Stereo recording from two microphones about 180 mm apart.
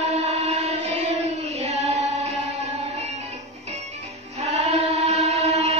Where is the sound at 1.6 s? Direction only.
35° right (ahead or behind).